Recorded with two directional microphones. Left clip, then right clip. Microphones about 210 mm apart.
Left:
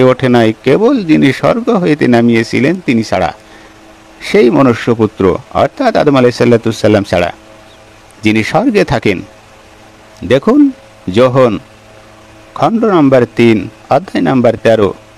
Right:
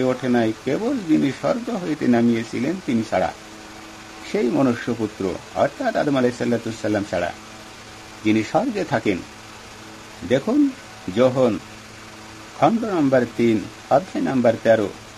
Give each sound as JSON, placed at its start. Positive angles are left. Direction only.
{"t": 0.0, "sound": "speech", "side_deg": 45}
{"t": 11.1, "sound": "speech", "side_deg": 45}
{"t": 12.5, "sound": "speech", "side_deg": 45}